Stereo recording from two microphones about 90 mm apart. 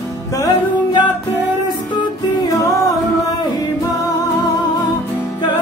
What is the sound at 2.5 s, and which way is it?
Music, 40° left (ahead or behind).